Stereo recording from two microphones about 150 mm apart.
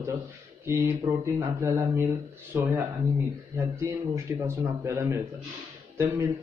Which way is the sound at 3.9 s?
20° right (ahead or behind).